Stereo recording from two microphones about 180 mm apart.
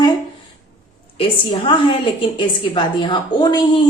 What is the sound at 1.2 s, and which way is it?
A woman's voice, 30° left (ahead or behind).